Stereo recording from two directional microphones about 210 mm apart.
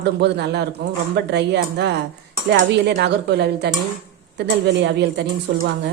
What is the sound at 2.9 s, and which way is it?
A woman's voice, 50° right (ahead or behind).